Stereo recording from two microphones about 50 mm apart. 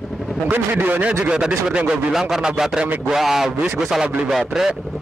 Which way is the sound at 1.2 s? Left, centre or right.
Right.